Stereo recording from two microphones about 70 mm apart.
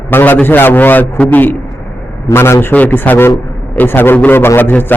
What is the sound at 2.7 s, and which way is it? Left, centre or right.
A man's voice, left.